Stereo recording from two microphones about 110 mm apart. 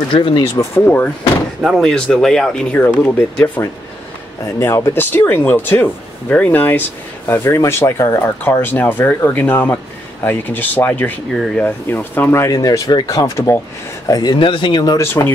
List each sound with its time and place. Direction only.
0.1 s speech: 50° left (ahead or behind)
0.7 s speech: 15° left (ahead or behind)
1.6 s speech: centre (ahead or behind); by 11.1 s 15° left (ahead or behind)
11.3 s speech: centre (ahead or behind)
11.6 s speech: 15° left (ahead or behind)
12.5 s speech: 35° left (ahead or behind)
15.2 s speech: 25° left (ahead or behind)